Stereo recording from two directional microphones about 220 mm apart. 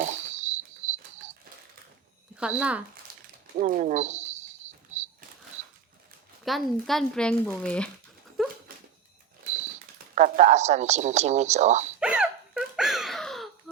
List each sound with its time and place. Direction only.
0.1 s cricket: 30° right (ahead or behind)
2.3 s speech: 5° right (ahead or behind)
3.1 s a sound: 40° right (ahead or behind)
3.6 s speech: 35° right (ahead or behind)
6.4 s speech: centre (ahead or behind)
8.4 s dog: centre (ahead or behind)
10.2 s a woman's voice: 35° right (ahead or behind)
11.9 s hiccup: 5° right (ahead or behind)